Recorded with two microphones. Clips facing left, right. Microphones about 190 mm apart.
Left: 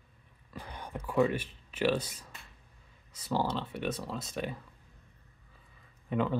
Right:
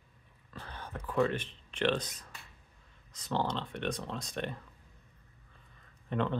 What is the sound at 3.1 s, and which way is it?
Speech, 10° left (ahead or behind).